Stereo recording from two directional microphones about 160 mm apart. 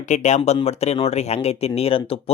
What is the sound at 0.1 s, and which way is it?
Speech, 50° left (ahead or behind).